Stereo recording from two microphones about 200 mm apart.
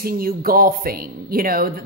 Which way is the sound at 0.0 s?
45° right (ahead or behind).